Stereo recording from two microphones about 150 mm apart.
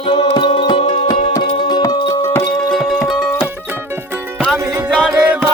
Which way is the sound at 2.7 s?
Centre (ahead or behind).